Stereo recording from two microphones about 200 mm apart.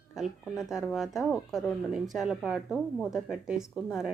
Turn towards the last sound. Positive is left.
turn(degrees=-5)  # may be behind; listen again after turning